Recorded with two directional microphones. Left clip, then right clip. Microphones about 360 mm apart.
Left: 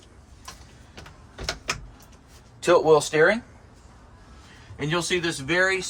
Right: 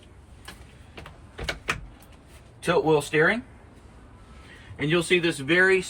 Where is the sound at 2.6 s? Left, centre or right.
Left.